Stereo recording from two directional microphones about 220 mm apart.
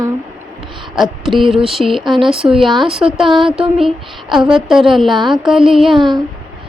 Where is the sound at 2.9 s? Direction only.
Centre (ahead or behind).